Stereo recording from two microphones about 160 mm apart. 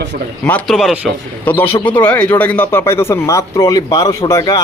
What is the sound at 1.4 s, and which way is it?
Speech, 10° left (ahead or behind).